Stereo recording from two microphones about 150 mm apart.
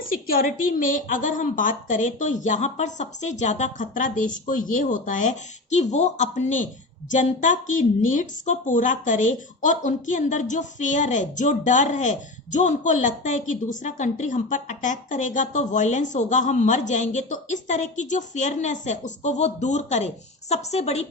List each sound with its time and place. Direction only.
0.0 s a woman's voice: 70° left (ahead or behind); by 21.1 s 45° left (ahead or behind)